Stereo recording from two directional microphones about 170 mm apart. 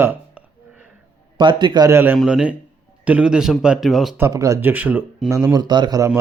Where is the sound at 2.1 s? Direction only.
5° right (ahead or behind).